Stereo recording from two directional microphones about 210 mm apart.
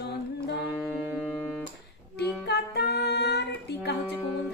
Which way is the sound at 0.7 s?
10° right (ahead or behind).